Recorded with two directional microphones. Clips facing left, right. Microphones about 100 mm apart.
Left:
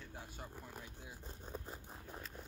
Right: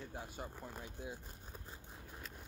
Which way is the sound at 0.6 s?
25° right (ahead or behind).